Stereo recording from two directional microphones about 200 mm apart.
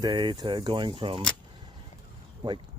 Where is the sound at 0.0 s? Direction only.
20° right (ahead or behind).